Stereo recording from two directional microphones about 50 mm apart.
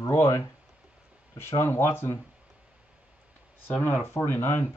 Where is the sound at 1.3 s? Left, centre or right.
Left.